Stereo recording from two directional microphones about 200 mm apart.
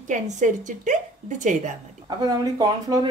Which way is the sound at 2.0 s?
20° right (ahead or behind).